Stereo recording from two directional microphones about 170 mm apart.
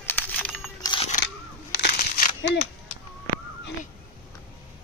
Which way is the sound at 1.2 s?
90° left.